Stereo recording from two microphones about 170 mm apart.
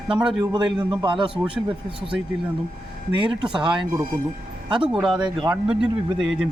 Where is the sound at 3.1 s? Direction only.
30° right (ahead or behind).